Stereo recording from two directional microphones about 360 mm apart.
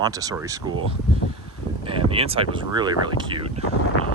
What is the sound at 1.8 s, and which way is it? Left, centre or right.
Speech, centre.